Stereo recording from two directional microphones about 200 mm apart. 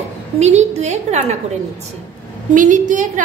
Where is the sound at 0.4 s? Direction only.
35° right (ahead or behind).